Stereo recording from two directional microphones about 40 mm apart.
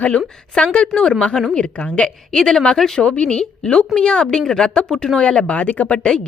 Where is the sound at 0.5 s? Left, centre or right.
Left.